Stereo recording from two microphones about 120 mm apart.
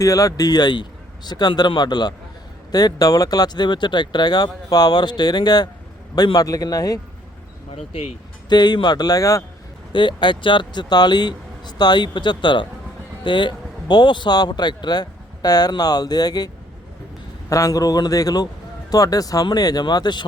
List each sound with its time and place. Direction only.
0.0 s a man's voice: 30° left (ahead or behind)
7.7 s speech: 55° left (ahead or behind)
8.4 s a man's voice: 35° left (ahead or behind)
9.9 s a man's voice: 45° left (ahead or behind)
17.5 s a man's voice: 30° left (ahead or behind)